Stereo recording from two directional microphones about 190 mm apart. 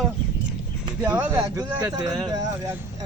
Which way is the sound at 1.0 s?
10° right (ahead or behind).